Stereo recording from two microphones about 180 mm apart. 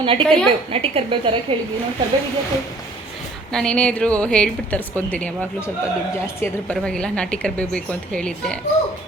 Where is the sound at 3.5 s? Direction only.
5° left (ahead or behind).